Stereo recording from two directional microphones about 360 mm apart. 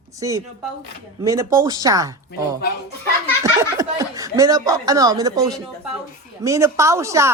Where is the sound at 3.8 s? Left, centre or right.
Centre.